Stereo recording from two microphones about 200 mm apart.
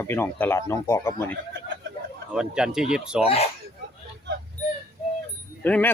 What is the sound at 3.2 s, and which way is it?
Speech, 30° left (ahead or behind).